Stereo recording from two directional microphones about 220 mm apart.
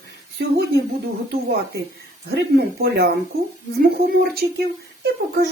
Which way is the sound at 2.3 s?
45° right (ahead or behind).